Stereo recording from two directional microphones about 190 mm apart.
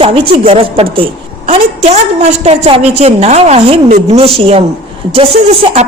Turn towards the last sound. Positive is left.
turn(degrees=-30)  # may be behind; listen again after turning